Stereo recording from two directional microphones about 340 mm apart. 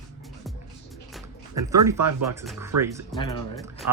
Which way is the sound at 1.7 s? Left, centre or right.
Centre.